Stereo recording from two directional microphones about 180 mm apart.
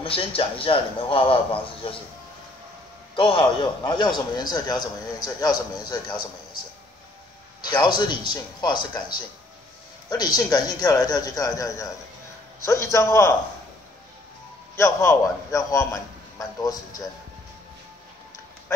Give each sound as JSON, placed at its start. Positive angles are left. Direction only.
{"t": 0.0, "sound": "a man's voice", "side_deg": 30}
{"t": 3.2, "sound": "a man's voice", "side_deg": 30}
{"t": 7.6, "sound": "a man's voice", "side_deg": 25}
{"t": 10.0, "sound": "a man's voice", "side_deg": 25}
{"t": 14.8, "sound": "a man's voice", "side_deg": 15}